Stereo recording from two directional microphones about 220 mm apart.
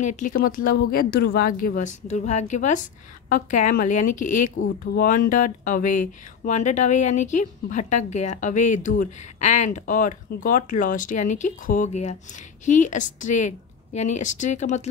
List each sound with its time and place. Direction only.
0.0 s speech: 35° left (ahead or behind)